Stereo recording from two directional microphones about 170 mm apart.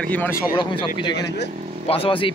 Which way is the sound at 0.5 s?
25° left (ahead or behind).